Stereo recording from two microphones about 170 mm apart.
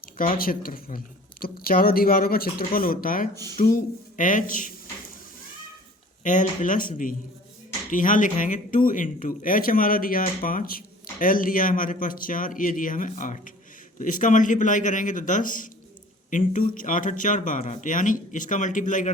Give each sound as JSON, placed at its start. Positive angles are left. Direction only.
{"t": 0.0, "sound": "speech", "side_deg": 55}
{"t": 6.2, "sound": "speech", "side_deg": 50}